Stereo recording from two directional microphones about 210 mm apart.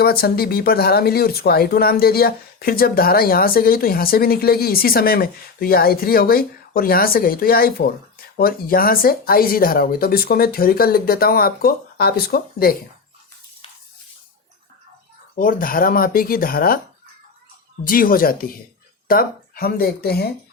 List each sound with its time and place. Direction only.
0.0 s speech: 45° left (ahead or behind)
15.4 s speech: 40° left (ahead or behind)
17.8 s speech: 40° left (ahead or behind)